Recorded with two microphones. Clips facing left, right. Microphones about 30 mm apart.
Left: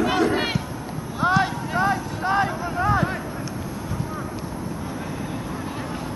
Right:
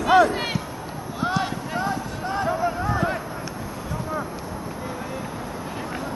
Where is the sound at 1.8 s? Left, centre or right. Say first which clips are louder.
Left 6 dB; centre.